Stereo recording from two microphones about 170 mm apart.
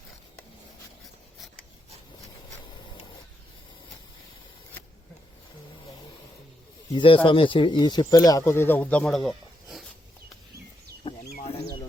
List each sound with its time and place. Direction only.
6.9 s speech: 30° left (ahead or behind); by 9.8 s centre (ahead or behind)
11.1 s chicken: 30° left (ahead or behind)